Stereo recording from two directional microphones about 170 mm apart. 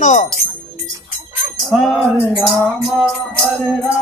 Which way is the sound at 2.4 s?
Centre (ahead or behind).